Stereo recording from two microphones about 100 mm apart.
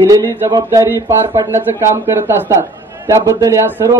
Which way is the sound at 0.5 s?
35° right (ahead or behind).